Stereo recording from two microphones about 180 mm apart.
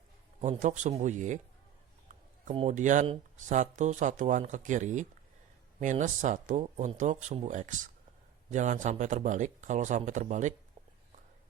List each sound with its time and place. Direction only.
0.4 s speech: 40° right (ahead or behind)
2.6 s speech: 40° right (ahead or behind)